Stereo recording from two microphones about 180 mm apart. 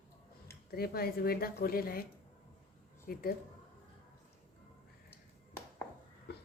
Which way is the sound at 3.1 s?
55° left (ahead or behind).